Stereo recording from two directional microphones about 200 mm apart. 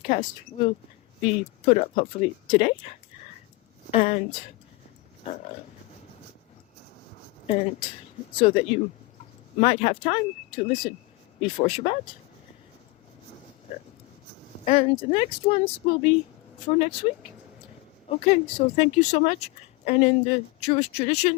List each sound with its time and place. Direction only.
0.1 s a woman's voice: 35° left (ahead or behind)
3.9 s a woman's voice: 30° left (ahead or behind)
7.4 s a woman's voice: 30° left (ahead or behind)
14.6 s speech: 30° left (ahead or behind)
18.2 s a woman's voice: 30° left (ahead or behind)